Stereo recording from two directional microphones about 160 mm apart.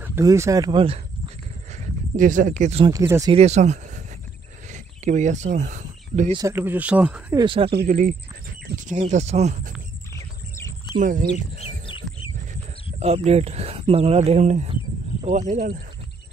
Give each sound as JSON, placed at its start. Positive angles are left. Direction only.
{"t": 0.0, "sound": "speech", "side_deg": -15}
{"t": 2.1, "sound": "speech", "side_deg": -55}
{"t": 2.9, "sound": "speech", "side_deg": -20}
{"t": 3.3, "sound": "speech", "side_deg": -40}
{"t": 6.3, "sound": "speech", "side_deg": -15}
{"t": 7.3, "sound": "speech", "side_deg": -30}
{"t": 7.7, "sound": "speech", "side_deg": -65}
{"t": 10.1, "sound": "a sound", "side_deg": 20}
{"t": 11.0, "sound": "speech", "side_deg": -55}
{"t": 13.0, "sound": "speech", "side_deg": -40}